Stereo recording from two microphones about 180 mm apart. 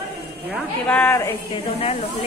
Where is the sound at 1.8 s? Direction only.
35° left (ahead or behind).